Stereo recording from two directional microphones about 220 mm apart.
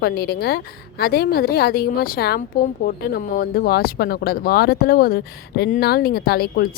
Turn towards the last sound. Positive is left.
turn(degrees=45)  # may be behind; listen again after turning